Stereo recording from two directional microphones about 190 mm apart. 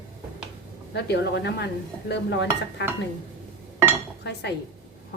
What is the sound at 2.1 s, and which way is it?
Dishes, 65° left (ahead or behind).